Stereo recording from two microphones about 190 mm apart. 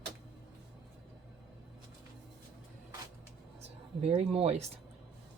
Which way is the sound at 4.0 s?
35° right (ahead or behind).